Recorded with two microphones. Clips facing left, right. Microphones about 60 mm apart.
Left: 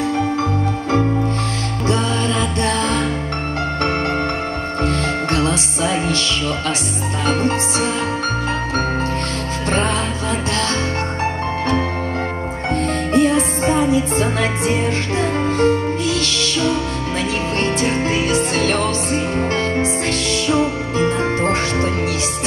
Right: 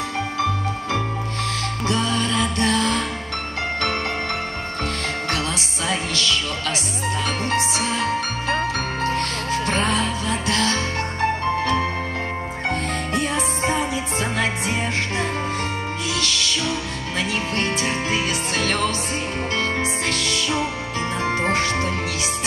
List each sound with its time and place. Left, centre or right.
1.9 s music: left
4.8 s music: left
9.7 s music: left
13.1 s music: left